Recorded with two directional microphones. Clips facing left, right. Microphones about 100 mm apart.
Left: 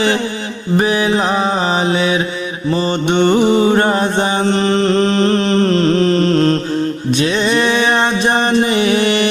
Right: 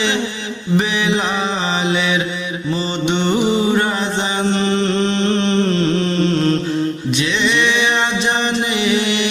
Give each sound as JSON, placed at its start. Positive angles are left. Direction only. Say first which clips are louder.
{"t": 0.8, "sound": "mantra", "louder": "left 5 dB", "side_deg": 40}
{"t": 7.1, "sound": "music", "louder": "left 6 dB", "side_deg": 45}